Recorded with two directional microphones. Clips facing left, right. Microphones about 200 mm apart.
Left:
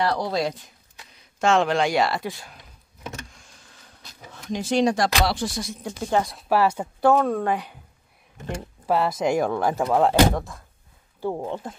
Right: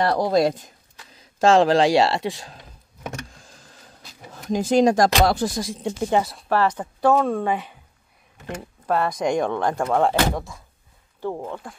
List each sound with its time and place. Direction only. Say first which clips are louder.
0.0 s speech: right 5 dB; 45° right (ahead or behind)
1.4 s speech: right 5 dB; 35° right (ahead or behind)
3.3 s a sound: right 4 dB; 35° right (ahead or behind)
6.0 s speech: right 1 dB; 10° right (ahead or behind)
6.3 s speech: even; 10° left (ahead or behind)
8.8 s speech: even; 5° left (ahead or behind)
11.1 s speech: left 1 dB; 15° left (ahead or behind)